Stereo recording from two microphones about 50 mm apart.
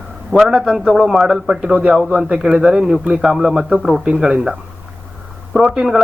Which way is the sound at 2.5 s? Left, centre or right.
Right.